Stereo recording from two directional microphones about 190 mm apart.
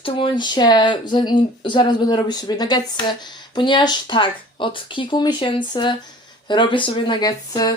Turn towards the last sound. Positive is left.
turn(degrees=20)  # may be behind; listen again after turning